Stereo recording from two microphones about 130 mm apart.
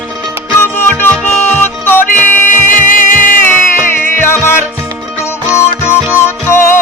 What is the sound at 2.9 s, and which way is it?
Music, 90° left.